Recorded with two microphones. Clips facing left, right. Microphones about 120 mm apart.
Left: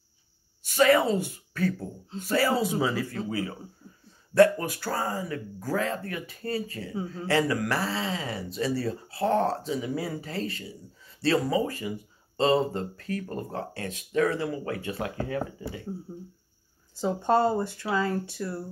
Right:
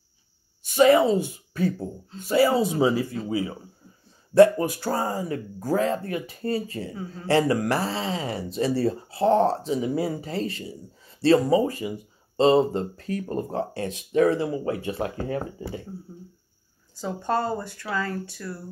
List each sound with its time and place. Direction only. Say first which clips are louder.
0.7 s speech: right 4 dB; 20° right (ahead or behind)
6.9 s speech: left 2 dB; 25° left (ahead or behind)
7.2 s speech: right 5 dB; 30° right (ahead or behind)
16.9 s speech: left 2 dB; 20° left (ahead or behind)